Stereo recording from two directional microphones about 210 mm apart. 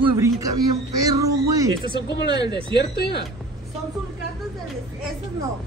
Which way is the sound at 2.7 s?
50° left (ahead or behind).